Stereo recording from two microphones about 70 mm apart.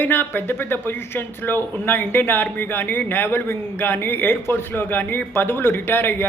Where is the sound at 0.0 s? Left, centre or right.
Left.